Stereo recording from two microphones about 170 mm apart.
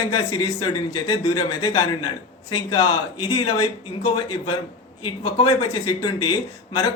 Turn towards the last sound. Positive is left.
turn(degrees=25)  # may be behind; listen again after turning